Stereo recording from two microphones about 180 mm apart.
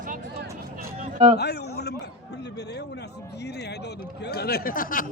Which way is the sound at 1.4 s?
65° left (ahead or behind).